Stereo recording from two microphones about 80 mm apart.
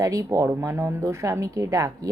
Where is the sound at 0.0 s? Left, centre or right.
Right.